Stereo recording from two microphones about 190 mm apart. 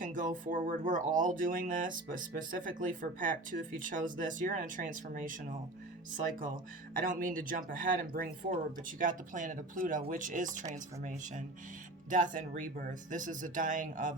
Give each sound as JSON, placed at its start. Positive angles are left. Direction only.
{"t": 0.0, "sound": "speech", "side_deg": -45}
{"t": 7.0, "sound": "speech", "side_deg": -45}